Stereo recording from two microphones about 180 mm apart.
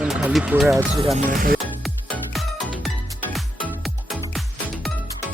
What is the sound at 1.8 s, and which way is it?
Music, centre (ahead or behind).